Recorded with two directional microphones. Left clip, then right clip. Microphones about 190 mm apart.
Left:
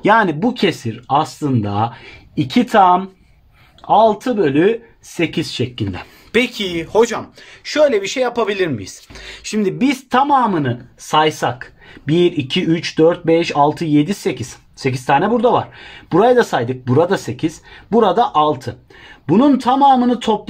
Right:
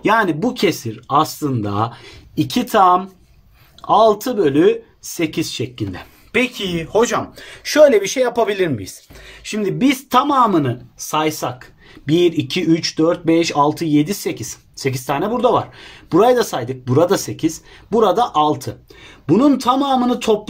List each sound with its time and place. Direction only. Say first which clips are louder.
0.0 s speech: left 2 dB; 35° left (ahead or behind); by 7.2 s 20° left (ahead or behind)
7.6 s speech: right 3 dB; 5° right (ahead or behind)
9.4 s speech: left 1 dB; 40° left (ahead or behind); by 20.4 s 25° left (ahead or behind)